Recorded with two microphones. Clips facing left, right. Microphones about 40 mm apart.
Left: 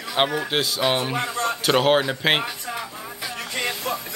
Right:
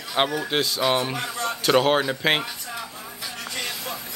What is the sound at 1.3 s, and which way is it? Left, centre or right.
Speech, left.